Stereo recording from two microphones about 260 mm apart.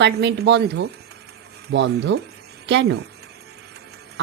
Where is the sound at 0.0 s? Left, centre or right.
Right.